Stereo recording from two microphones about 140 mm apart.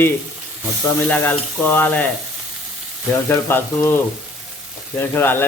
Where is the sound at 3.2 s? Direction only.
15° left (ahead or behind).